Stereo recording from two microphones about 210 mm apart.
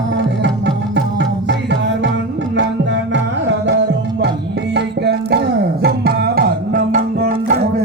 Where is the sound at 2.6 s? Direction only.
60° right (ahead or behind).